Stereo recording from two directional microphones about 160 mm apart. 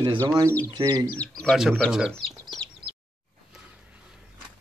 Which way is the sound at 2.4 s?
5° left (ahead or behind).